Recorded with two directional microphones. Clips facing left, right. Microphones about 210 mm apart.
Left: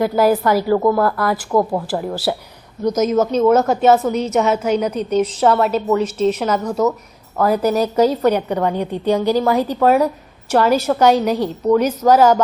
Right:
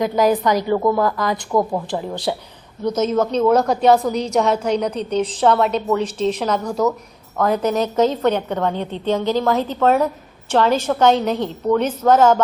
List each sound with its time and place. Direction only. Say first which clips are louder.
0.0 s a woman's voice: left 2 dB; 10° left (ahead or behind)
4.9 s a woman's voice: left 3 dB; 30° right (ahead or behind)
5.4 s a woman's voice: right 2 dB; 5° left (ahead or behind)